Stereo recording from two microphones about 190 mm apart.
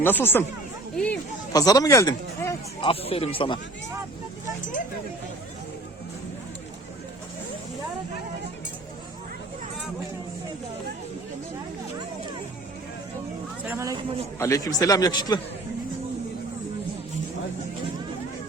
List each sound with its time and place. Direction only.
0.0 s speech: 10° left (ahead or behind)
0.9 s a sound: 5° left (ahead or behind)
1.5 s speech: 20° left (ahead or behind)
2.8 s a man's voice: 30° left (ahead or behind)
13.7 s speech: 15° right (ahead or behind)
14.3 s a man's voice: 15° left (ahead or behind)